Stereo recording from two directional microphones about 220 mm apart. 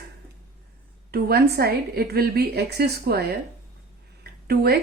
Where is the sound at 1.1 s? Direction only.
45° right (ahead or behind).